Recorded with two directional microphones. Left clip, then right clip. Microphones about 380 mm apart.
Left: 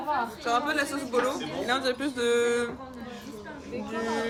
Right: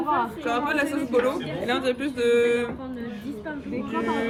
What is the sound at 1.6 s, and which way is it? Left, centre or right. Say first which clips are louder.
Speech: right 2 dB; centre.